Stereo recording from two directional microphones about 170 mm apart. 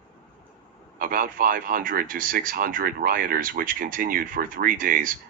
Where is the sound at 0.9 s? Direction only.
55° right (ahead or behind).